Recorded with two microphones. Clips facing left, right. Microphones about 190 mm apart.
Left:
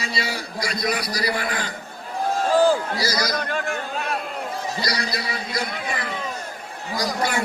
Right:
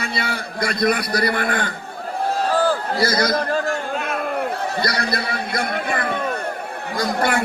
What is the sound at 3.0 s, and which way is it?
Speech, 55° right (ahead or behind).